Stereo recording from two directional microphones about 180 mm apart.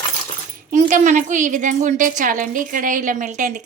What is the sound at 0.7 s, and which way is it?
A woman's voice, 40° right (ahead or behind).